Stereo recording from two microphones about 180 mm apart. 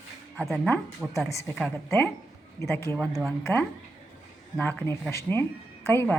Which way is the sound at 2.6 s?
15° left (ahead or behind).